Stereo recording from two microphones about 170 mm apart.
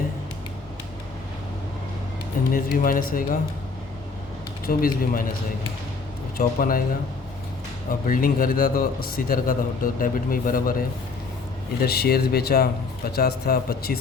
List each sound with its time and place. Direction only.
2.5 s a man's voice: 55° left (ahead or behind)
4.6 s a man's voice: 60° left (ahead or behind)
6.3 s a man's voice: 55° left (ahead or behind)
8.0 s a man's voice: 55° left (ahead or behind)
11.8 s a man's voice: 65° left (ahead or behind)